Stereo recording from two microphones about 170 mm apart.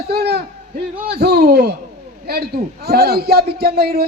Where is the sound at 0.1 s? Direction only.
70° right (ahead or behind).